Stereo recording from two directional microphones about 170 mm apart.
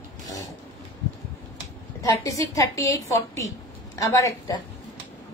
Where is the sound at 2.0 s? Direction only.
20° left (ahead or behind).